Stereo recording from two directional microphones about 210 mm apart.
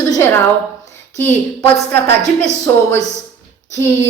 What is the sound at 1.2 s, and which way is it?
Speech, 10° left (ahead or behind).